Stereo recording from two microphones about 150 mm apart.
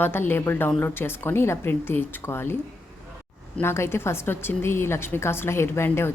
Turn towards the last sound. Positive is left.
turn(degrees=15)  # may be behind; listen again after turning